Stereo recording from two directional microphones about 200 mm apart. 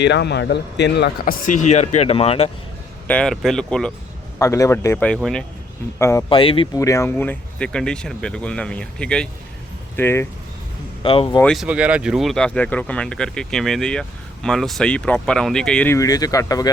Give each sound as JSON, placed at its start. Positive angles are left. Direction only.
{"t": 0.0, "sound": "speech", "side_deg": 60}
{"t": 3.1, "sound": "speech", "side_deg": 5}
{"t": 4.4, "sound": "a man's voice", "side_deg": 15}
{"t": 6.0, "sound": "a man's voice", "side_deg": 15}
{"t": 6.3, "sound": "speech", "side_deg": 25}
{"t": 6.7, "sound": "speech", "side_deg": 15}
{"t": 11.0, "sound": "speech", "side_deg": 25}
{"t": 11.3, "sound": "speech", "side_deg": 0}